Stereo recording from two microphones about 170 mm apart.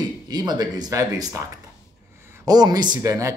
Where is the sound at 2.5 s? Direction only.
25° right (ahead or behind).